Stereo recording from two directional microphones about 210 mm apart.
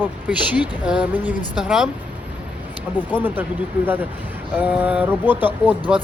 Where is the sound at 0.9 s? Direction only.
5° right (ahead or behind).